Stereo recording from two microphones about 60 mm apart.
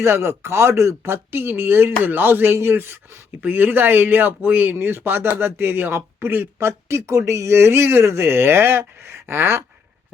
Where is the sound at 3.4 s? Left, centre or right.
Right.